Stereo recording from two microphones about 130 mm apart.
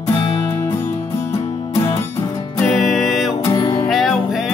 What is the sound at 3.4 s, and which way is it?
Music, 25° left (ahead or behind).